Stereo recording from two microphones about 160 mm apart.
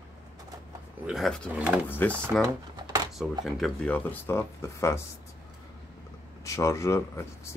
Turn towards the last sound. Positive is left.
turn(degrees=20)  # may be behind; listen again after turning